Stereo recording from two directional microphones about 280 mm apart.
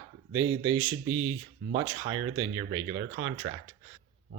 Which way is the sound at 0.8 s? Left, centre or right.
Right.